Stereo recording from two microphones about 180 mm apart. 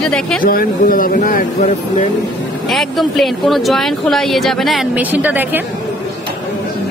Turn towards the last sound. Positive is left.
turn(degrees=-10)  # may be behind; listen again after turning